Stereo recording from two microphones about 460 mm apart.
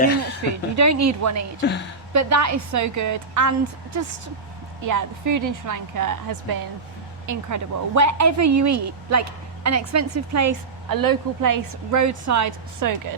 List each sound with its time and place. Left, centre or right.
0.4 s speech: right
4.8 s speech: right